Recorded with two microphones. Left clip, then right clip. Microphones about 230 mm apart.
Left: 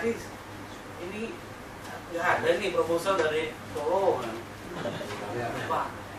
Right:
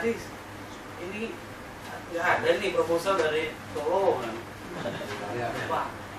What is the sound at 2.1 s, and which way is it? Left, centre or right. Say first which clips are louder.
A man's voice: right 1 dB; centre.